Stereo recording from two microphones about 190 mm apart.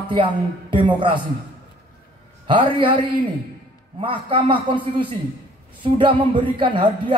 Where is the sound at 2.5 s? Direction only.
25° right (ahead or behind).